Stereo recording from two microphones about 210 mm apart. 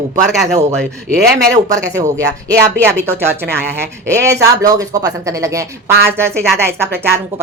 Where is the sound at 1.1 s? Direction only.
50° right (ahead or behind).